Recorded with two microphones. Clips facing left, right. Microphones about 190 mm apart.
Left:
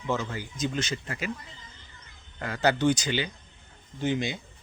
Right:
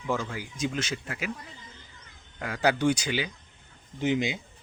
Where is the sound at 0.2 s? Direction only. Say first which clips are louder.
Left 1 dB; 5° left (ahead or behind).